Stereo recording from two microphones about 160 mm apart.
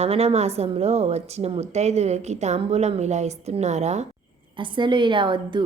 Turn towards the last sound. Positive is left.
turn(degrees=-30)  # may be behind; listen again after turning